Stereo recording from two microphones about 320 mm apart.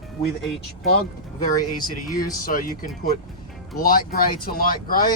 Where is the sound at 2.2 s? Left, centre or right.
Left.